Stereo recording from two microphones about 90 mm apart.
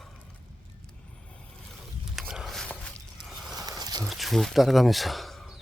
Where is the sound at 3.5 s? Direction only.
45° right (ahead or behind).